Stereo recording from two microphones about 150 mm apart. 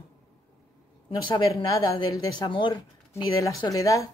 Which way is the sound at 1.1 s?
25° left (ahead or behind).